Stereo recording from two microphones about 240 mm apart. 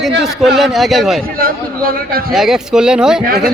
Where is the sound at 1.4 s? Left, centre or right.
Right.